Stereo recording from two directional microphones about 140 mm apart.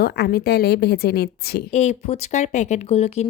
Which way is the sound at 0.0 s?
90° left.